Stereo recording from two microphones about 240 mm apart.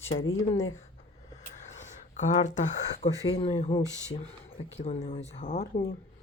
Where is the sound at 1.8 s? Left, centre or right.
Left.